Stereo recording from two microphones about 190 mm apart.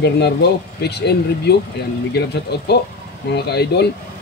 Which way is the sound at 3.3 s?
60° left (ahead or behind).